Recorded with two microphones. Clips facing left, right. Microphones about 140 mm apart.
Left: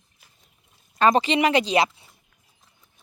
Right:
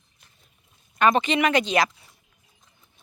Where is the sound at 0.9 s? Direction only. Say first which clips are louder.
Left 1 dB; 30° left (ahead or behind).